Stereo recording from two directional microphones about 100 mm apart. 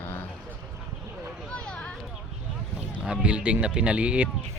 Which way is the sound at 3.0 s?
10° right (ahead or behind).